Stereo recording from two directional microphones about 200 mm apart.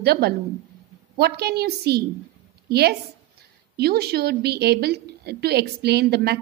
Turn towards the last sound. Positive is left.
turn(degrees=-55)  # may be behind; listen again after turning